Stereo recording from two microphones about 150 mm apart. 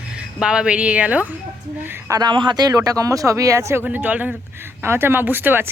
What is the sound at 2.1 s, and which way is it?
Speech, 30° right (ahead or behind).